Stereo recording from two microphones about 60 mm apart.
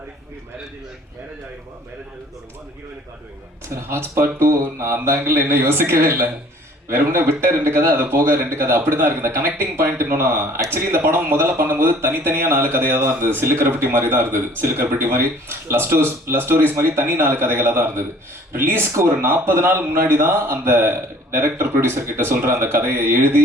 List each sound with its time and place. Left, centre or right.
3.7 s speech: right